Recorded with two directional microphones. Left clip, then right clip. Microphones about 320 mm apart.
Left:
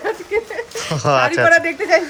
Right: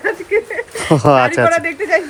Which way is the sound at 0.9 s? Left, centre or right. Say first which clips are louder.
Right 4 dB; centre.